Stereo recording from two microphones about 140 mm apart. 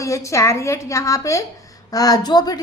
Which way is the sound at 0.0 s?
20° left (ahead or behind).